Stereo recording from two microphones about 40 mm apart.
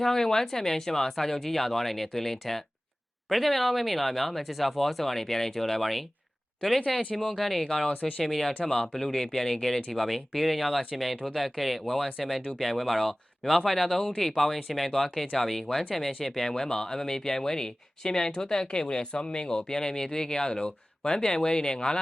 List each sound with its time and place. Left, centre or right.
0.0 s speech: centre
8.6 s speech: centre
8.9 s speech: centre